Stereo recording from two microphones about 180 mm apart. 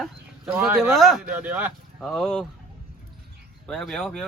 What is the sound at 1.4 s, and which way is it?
Speech, 10° right (ahead or behind).